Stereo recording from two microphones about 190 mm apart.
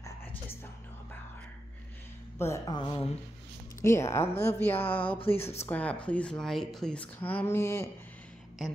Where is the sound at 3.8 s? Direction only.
15° left (ahead or behind).